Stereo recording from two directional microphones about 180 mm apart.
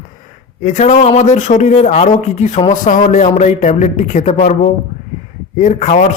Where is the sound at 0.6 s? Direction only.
40° left (ahead or behind).